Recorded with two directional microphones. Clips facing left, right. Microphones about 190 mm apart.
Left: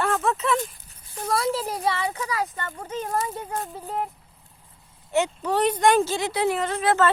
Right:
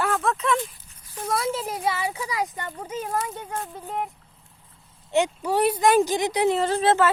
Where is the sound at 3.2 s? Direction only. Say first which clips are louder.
Left 1 dB; centre (ahead or behind).